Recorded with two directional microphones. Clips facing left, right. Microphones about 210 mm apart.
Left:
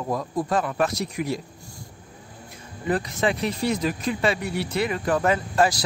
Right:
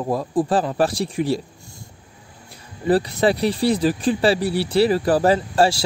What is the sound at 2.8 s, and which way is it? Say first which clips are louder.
Speech: right 6 dB; 35° right (ahead or behind).